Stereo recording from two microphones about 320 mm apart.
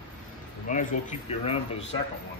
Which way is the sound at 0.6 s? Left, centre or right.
Left.